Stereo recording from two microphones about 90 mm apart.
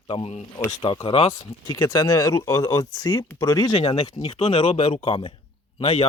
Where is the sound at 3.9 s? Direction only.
90° left.